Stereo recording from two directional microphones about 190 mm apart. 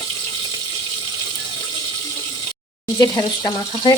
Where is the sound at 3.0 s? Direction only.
15° left (ahead or behind).